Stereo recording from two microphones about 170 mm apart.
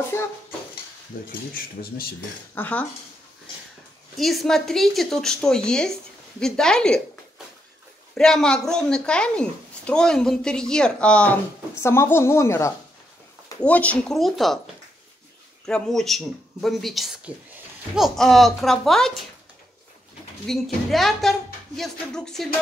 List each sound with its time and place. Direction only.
0.1 s speech: 15° left (ahead or behind)
1.1 s speech: 50° left (ahead or behind)
2.5 s speech: 10° left (ahead or behind)
4.2 s speech: centre (ahead or behind)
8.1 s speech: 5° left (ahead or behind)
15.6 s speech: centre (ahead or behind)
20.4 s speech: centre (ahead or behind)